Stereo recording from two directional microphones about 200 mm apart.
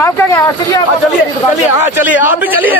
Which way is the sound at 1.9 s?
10° right (ahead or behind).